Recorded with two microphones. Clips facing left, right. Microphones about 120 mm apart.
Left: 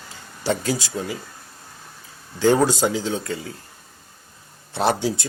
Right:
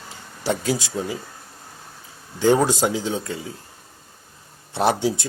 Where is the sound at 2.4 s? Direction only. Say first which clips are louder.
Even; 10° right (ahead or behind).